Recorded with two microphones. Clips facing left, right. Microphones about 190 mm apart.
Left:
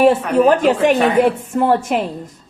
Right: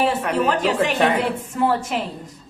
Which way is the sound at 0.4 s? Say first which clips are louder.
Left 8 dB; 50° left (ahead or behind).